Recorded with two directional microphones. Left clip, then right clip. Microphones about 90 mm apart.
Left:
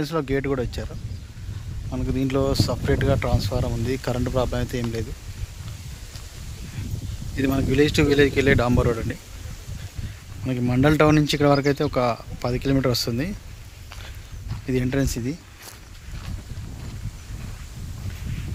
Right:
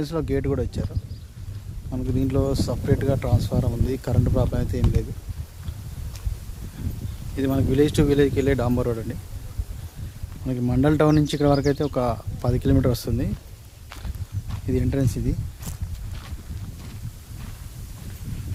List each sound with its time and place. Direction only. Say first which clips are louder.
0.0 s speech: left 1 dB; 10° right (ahead or behind)
1.9 s speech: left 1 dB; 10° right (ahead or behind)
7.3 s speech: left 1 dB; 30° right (ahead or behind)
8.0 s speech: left 3 dB; 25° right (ahead or behind)
8.4 s speech: left 3 dB; 10° right (ahead or behind)
10.4 s speech: left 2 dB; 15° right (ahead or behind)
11.3 s speech: left 2 dB; 10° right (ahead or behind)
11.6 s speech: left 1 dB; 25° right (ahead or behind); by 12.7 s 40° right (ahead or behind)
12.7 s speech: left 2 dB; 25° right (ahead or behind)
13.1 s speech: left 1 dB; 10° right (ahead or behind)
14.7 s speech: left 1 dB; 10° right (ahead or behind)